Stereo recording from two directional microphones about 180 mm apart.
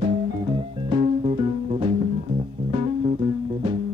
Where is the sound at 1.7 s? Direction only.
30° right (ahead or behind).